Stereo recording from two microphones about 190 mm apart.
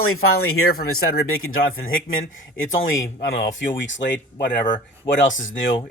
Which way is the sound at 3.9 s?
70° left (ahead or behind).